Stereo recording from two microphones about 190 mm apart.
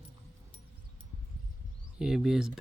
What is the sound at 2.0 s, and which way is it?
Speech, 5° right (ahead or behind).